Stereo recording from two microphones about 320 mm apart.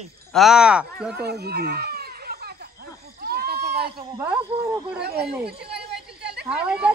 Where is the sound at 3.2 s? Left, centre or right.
Right.